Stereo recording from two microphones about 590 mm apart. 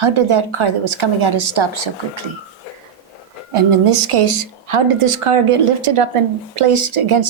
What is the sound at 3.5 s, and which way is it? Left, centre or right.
A woman's voice, right.